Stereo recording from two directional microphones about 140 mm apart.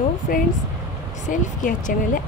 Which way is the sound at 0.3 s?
90° left.